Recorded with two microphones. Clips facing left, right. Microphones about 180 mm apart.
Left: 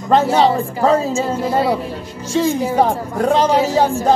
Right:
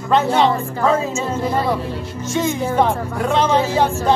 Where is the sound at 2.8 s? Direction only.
40° left (ahead or behind).